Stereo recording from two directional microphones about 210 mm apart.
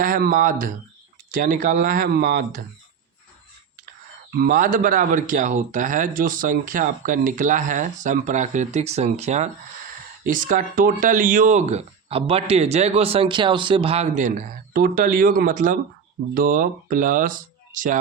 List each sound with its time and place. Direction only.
0.0 s speech: 40° right (ahead or behind)
3.8 s speech: 45° right (ahead or behind)